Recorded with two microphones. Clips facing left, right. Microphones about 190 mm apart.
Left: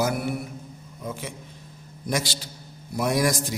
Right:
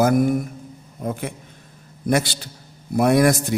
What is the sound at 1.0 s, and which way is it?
A man's voice, 55° right (ahead or behind).